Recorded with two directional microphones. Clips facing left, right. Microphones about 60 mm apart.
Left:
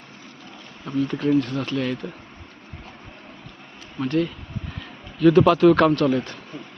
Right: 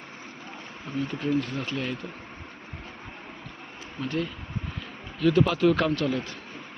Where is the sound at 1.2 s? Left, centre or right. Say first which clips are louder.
Left 6 dB; left.